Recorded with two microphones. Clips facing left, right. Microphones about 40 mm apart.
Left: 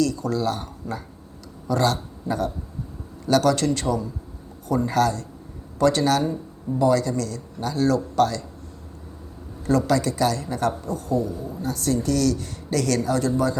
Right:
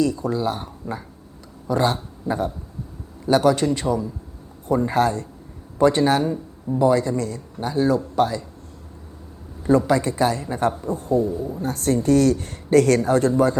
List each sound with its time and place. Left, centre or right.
0.0 s a man's voice: right
4.7 s a man's voice: right
9.6 s a man's voice: right
11.6 s speech: right